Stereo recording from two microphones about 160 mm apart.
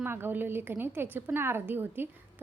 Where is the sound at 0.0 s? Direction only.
15° right (ahead or behind).